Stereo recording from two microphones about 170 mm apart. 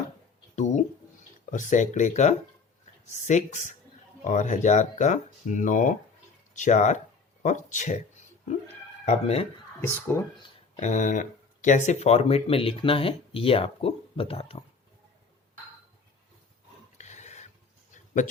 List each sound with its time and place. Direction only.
0.5 s speech: 45° left (ahead or behind)
9.0 s speech: 35° left (ahead or behind)
9.8 s speech: 15° left (ahead or behind)
10.8 s speech: 45° left (ahead or behind)
17.0 s a sound: 45° left (ahead or behind)